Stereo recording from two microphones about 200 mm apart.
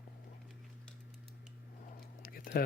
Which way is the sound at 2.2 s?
45° left (ahead or behind).